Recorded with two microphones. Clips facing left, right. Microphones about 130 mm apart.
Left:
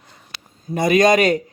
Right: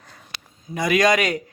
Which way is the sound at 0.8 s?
25° left (ahead or behind).